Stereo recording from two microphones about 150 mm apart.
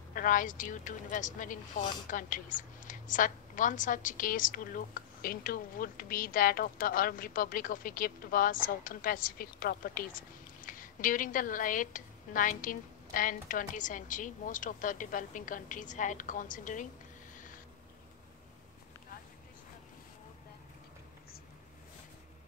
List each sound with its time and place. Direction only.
0.1 s a woman's voice: 65° left (ahead or behind)